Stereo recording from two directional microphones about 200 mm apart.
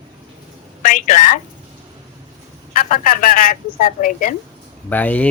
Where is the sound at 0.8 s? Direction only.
40° left (ahead or behind).